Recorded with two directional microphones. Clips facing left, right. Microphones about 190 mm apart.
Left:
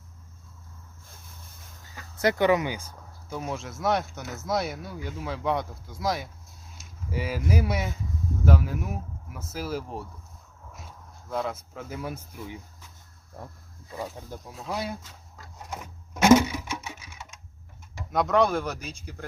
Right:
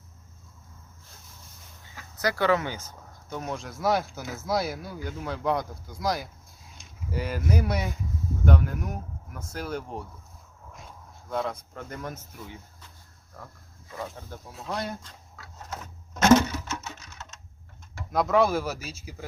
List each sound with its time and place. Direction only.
2.1 s speech: 20° left (ahead or behind); by 10.1 s 5° left (ahead or behind)
10.7 s a sound: centre (ahead or behind)
13.4 s speech: 25° left (ahead or behind)
14.2 s speech: 15° left (ahead or behind)
14.5 s speech: centre (ahead or behind)
15.5 s sewing machine: 10° left (ahead or behind)
18.1 s speech: centre (ahead or behind)